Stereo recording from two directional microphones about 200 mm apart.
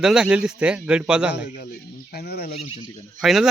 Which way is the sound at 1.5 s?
50° left (ahead or behind).